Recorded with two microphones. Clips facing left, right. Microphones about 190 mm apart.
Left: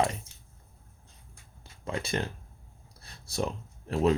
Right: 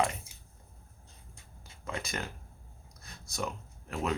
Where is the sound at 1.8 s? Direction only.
30° left (ahead or behind).